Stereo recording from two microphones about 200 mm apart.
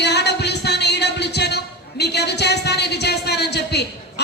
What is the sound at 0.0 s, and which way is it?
Music, 55° left (ahead or behind).